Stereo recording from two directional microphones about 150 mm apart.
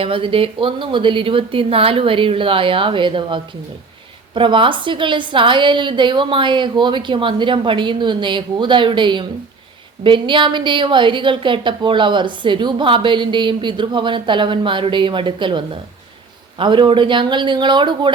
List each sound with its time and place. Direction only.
0.0 s a woman's voice: 35° right (ahead or behind)